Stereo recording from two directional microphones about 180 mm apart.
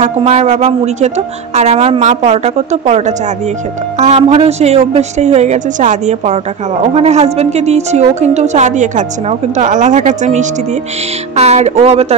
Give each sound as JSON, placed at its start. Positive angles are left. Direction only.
{"t": 0.0, "sound": "a woman's voice", "side_deg": -40}